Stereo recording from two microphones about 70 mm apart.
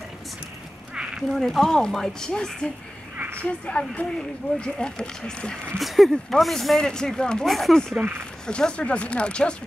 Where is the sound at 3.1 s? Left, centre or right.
Right.